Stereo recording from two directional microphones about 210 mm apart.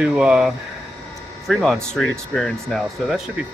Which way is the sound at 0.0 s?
5° right (ahead or behind).